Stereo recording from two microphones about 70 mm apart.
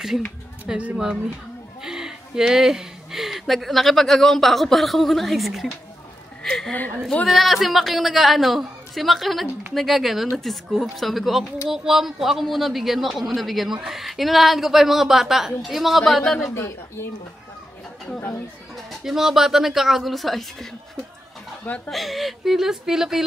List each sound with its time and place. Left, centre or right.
0.9 s speech: centre
6.4 s a sound: centre
7.2 s speech: centre
16.5 s a woman's voice: left
18.9 s speech: centre
21.6 s speech: centre
21.9 s speech: centre